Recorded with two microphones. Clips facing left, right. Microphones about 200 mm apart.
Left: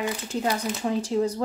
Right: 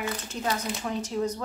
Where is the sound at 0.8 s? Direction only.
30° left (ahead or behind).